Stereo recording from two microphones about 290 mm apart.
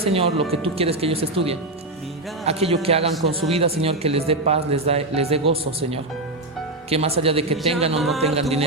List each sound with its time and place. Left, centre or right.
0.0 s a man's voice: centre
7.9 s music: centre
8.2 s a man's voice: right